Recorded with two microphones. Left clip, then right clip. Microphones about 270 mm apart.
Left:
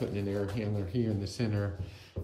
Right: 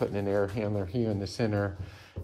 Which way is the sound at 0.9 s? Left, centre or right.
Right.